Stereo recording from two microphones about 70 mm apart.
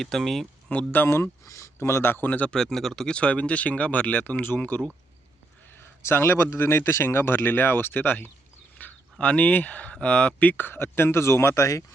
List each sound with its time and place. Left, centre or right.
0.0 s speech: centre
0.7 s speech: left
1.5 s a man's voice: left
2.5 s a man's voice: centre; by 8.3 s left
8.8 s a sound: left
9.1 s speech: centre; by 11.9 s left